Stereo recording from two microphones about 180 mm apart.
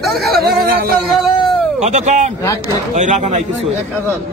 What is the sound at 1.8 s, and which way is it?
Speech, 40° right (ahead or behind).